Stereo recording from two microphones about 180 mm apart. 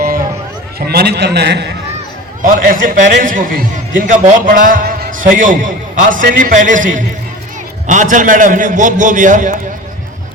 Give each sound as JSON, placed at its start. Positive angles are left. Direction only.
{"t": 0.8, "sound": "a man's voice", "side_deg": -60}
{"t": 2.4, "sound": "a man's voice", "side_deg": -50}